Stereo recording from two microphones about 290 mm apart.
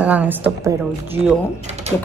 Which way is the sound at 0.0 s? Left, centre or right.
Centre.